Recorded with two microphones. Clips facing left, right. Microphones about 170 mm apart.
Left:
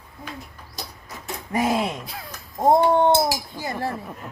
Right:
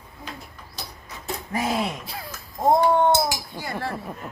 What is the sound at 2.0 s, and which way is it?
Speech, centre (ahead or behind).